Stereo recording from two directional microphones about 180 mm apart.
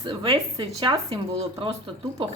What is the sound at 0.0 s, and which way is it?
Speech, 25° right (ahead or behind).